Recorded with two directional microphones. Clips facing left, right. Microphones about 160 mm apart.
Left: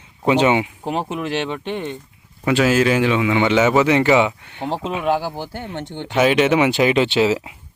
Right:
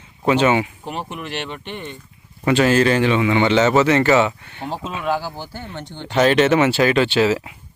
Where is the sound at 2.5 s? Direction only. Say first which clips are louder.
Right 1 dB; 5° left (ahead or behind); by 5.4 s 20° left (ahead or behind).